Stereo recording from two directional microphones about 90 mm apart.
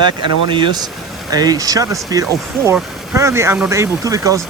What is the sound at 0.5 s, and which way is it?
Speech, 55° right (ahead or behind).